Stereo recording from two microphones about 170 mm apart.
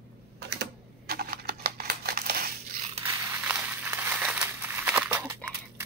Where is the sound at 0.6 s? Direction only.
65° right (ahead or behind).